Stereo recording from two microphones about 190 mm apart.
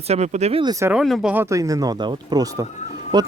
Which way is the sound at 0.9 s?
Centre (ahead or behind).